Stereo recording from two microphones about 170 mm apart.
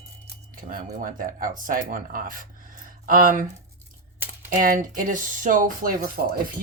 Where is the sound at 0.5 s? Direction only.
55° right (ahead or behind).